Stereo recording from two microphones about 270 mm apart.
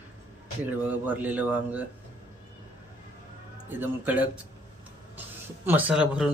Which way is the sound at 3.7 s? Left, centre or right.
Centre.